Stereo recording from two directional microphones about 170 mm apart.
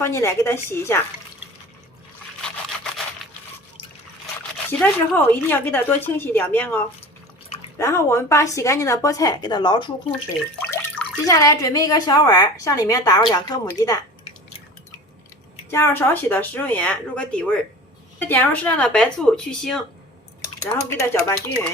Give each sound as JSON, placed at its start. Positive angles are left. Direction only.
{"t": 0.0, "sound": "speech", "side_deg": 15}
{"t": 4.7, "sound": "speech", "side_deg": 10}
{"t": 10.6, "sound": "speech", "side_deg": 10}
{"t": 15.7, "sound": "speech", "side_deg": 15}
{"t": 20.6, "sound": "speech", "side_deg": 15}